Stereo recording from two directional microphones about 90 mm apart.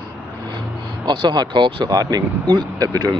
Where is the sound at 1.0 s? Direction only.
55° right (ahead or behind).